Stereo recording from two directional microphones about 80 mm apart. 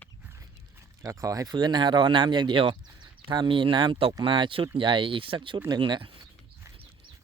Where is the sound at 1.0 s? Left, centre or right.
Right.